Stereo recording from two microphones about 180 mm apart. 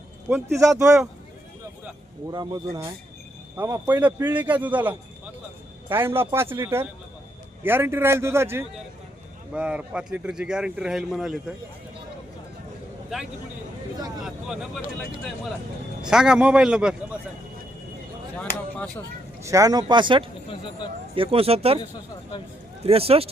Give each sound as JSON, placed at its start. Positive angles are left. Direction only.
{"t": 0.3, "sound": "a man's voice", "side_deg": -15}
{"t": 2.3, "sound": "a man's voice", "side_deg": -20}
{"t": 14.2, "sound": "speech", "side_deg": 0}
{"t": 16.0, "sound": "speech", "side_deg": -5}
{"t": 19.4, "sound": "speech", "side_deg": -15}
{"t": 20.5, "sound": "speech", "side_deg": 25}
{"t": 21.2, "sound": "speech", "side_deg": -30}
{"t": 22.8, "sound": "speech", "side_deg": -35}